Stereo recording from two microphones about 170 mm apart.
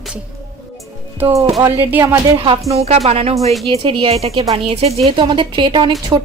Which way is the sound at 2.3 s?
30° right (ahead or behind).